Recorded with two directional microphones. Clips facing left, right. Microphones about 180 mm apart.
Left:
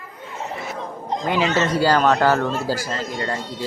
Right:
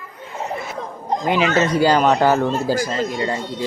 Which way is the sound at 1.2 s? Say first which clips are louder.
Right 2 dB; 15° right (ahead or behind).